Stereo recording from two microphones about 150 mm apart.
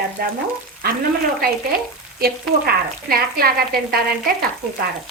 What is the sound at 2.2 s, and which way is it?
Frying, 90° right.